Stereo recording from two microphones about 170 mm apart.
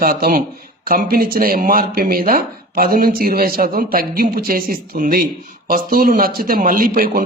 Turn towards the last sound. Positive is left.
turn(degrees=-55)  # may be behind; listen again after turning